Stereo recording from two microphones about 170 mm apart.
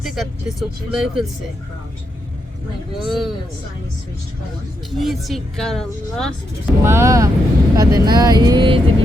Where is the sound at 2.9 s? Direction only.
Centre (ahead or behind).